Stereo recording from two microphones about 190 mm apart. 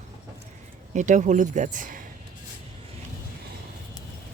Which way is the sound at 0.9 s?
40° right (ahead or behind).